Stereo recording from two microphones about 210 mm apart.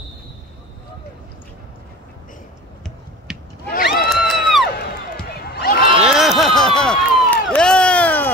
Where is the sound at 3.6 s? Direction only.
50° left (ahead or behind).